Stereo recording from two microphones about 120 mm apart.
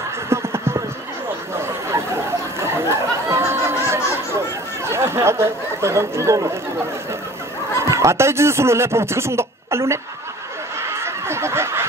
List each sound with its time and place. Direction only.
0.3 s music: 20° right (ahead or behind)
2.6 s a sound: 20° right (ahead or behind)
4.8 s speech: 20° right (ahead or behind)
7.8 s speech: 25° right (ahead or behind)
10.8 s snicker: 20° right (ahead or behind)